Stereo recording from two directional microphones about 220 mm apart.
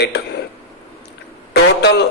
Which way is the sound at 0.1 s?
50° left (ahead or behind).